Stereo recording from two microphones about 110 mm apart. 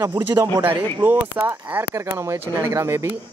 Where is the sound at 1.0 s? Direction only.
20° right (ahead or behind).